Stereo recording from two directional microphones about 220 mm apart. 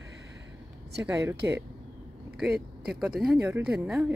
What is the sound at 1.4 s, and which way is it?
Speech, 10° right (ahead or behind).